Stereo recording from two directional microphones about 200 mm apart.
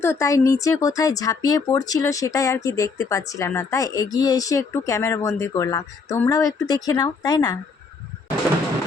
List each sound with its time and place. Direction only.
0.0 s speech: 15° left (ahead or behind)